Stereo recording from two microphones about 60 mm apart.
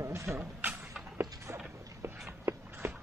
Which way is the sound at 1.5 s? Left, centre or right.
Right.